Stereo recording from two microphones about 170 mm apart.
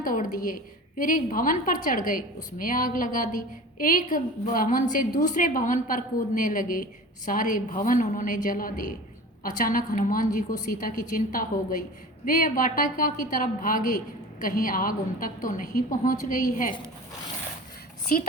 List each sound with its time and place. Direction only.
0.0 s a woman's voice: 55° left (ahead or behind)
12.2 s a woman's voice: 55° left (ahead or behind)